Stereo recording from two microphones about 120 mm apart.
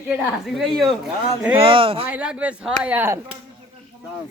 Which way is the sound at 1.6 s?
45° right (ahead or behind).